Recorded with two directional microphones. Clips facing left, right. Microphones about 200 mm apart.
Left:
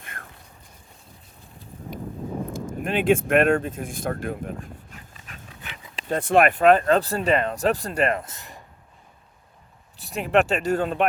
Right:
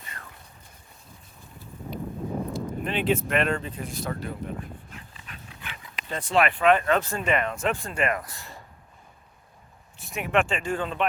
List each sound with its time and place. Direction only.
0.0 s a sound: 50° left (ahead or behind)
2.5 s speech: 45° left (ahead or behind); by 8.6 s 20° left (ahead or behind)
10.0 s speech: 35° left (ahead or behind)